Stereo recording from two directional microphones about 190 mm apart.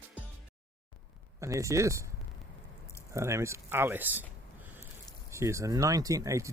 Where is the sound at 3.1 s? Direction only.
15° right (ahead or behind).